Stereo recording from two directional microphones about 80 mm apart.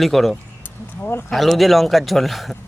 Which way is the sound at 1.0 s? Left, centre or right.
Left.